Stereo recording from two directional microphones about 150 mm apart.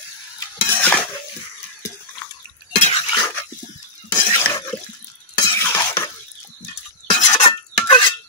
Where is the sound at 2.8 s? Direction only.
45° left (ahead or behind).